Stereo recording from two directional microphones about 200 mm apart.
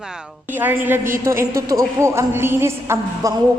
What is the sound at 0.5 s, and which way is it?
A woman's voice, 10° right (ahead or behind).